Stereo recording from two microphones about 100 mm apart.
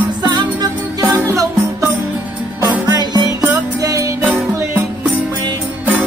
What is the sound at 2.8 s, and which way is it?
Music, 40° right (ahead or behind).